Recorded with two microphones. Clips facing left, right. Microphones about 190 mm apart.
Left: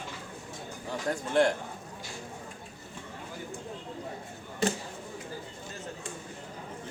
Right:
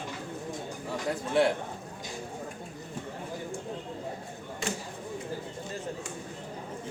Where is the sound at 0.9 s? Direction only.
5° right (ahead or behind).